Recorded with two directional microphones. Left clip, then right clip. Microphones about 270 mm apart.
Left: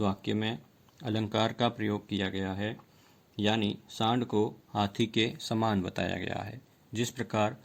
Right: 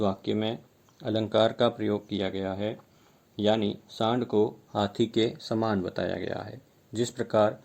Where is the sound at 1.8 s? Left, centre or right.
Left.